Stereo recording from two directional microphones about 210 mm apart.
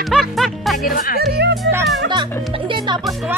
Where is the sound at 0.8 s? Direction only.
40° left (ahead or behind).